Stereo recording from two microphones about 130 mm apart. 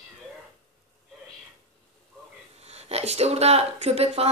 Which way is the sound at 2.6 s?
55° right (ahead or behind).